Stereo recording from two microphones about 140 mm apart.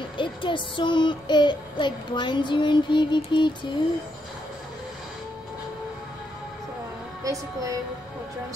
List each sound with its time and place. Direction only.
0.2 s child singing: 35° left (ahead or behind)
7.2 s music: 25° right (ahead or behind)